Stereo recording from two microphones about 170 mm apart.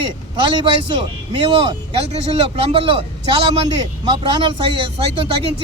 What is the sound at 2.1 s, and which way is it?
Speech, 35° right (ahead or behind).